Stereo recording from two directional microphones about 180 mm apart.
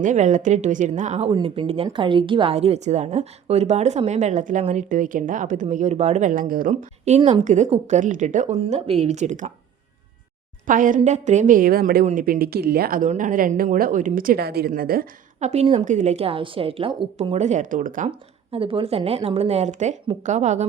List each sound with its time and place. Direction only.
0.0 s speech: 40° right (ahead or behind)
10.7 s speech: 50° right (ahead or behind)
15.4 s a woman's voice: 40° right (ahead or behind)
17.3 s speech: 40° right (ahead or behind)
18.5 s speech: 30° right (ahead or behind)